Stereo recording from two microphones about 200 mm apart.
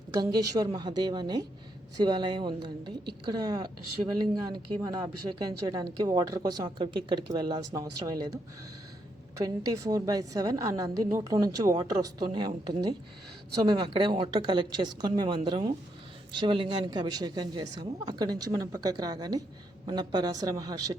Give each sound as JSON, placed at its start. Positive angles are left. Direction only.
{"t": 0.1, "sound": "a woman's voice", "side_deg": -20}
{"t": 9.4, "sound": "a woman's voice", "side_deg": -15}
{"t": 13.6, "sound": "a woman's voice", "side_deg": -20}